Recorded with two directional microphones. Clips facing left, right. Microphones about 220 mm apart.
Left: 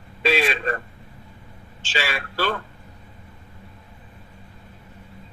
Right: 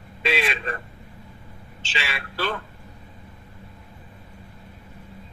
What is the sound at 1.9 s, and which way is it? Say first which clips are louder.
Speech: left 5 dB; 45° left (ahead or behind).